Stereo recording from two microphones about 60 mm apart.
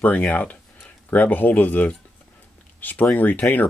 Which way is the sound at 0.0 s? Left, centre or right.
Left.